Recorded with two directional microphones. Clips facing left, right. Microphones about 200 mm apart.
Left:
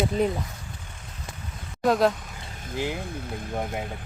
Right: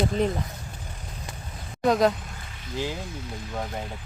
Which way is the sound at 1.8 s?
Centre (ahead or behind).